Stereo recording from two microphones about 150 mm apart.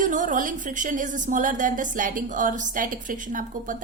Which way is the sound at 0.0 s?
60° right (ahead or behind).